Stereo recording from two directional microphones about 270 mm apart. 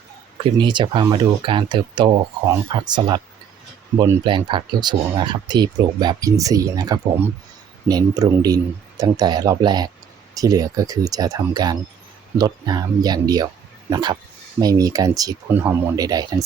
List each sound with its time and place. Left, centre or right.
0.4 s speech: centre